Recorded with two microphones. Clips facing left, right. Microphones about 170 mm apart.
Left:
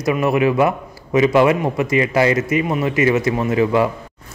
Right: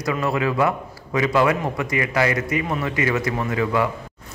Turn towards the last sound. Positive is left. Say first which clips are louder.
# left 5 dB
turn(degrees=25)  # may be behind; listen again after turning